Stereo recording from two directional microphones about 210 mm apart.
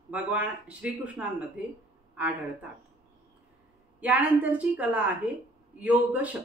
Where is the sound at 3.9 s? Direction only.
10° right (ahead or behind).